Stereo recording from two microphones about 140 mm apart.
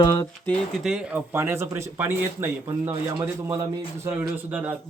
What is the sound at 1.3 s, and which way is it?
A man's voice, 20° right (ahead or behind).